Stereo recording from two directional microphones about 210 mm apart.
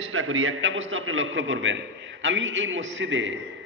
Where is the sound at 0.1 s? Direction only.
70° right (ahead or behind).